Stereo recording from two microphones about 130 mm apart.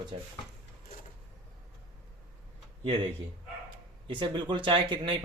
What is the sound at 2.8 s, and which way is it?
A man's voice, 45° right (ahead or behind).